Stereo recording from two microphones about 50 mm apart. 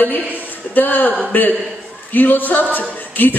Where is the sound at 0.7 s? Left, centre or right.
Left.